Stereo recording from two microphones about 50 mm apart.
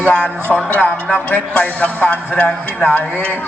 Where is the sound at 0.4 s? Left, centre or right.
Right.